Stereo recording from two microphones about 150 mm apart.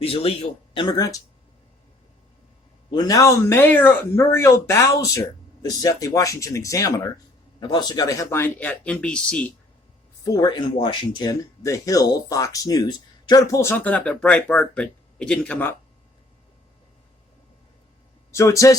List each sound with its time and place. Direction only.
0.0 s speech: 40° left (ahead or behind)
2.9 s speech: 25° left (ahead or behind); by 9.5 s 5° left (ahead or behind)
10.2 s speech: 25° left (ahead or behind)
18.3 s speech: 20° left (ahead or behind)